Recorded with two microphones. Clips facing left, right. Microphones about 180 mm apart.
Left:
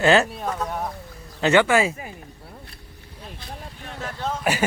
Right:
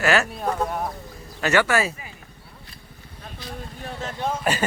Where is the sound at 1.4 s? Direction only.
20° left (ahead or behind).